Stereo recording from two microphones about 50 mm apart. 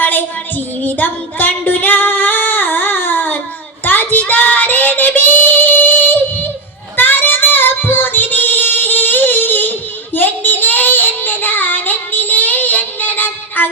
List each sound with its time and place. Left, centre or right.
0.0 s child singing: left